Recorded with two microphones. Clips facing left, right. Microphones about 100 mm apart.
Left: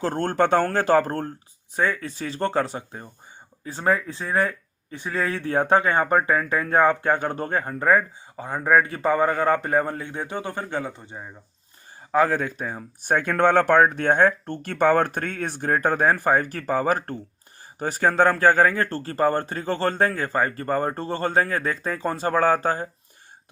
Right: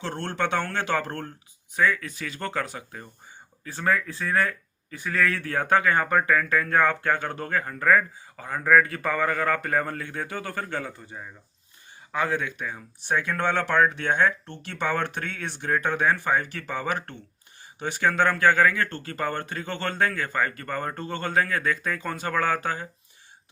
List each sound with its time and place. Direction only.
0.0 s speech: 40° left (ahead or behind); by 11.3 s 25° left (ahead or behind)
12.1 s speech: 40° left (ahead or behind)